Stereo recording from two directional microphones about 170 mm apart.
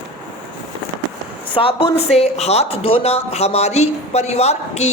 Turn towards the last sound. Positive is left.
turn(degrees=40)  # may be behind; listen again after turning